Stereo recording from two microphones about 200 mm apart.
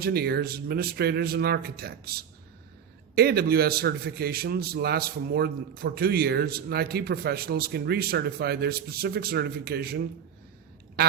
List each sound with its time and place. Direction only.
0.0 s a man's voice: 50° right (ahead or behind)